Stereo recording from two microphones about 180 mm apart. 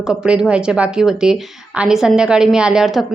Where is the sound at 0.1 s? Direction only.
5° right (ahead or behind).